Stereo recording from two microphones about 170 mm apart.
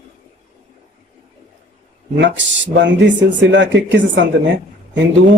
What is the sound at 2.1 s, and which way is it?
Speech, 90° right.